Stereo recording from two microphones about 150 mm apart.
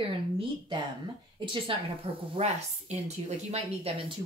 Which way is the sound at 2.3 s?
45° right (ahead or behind).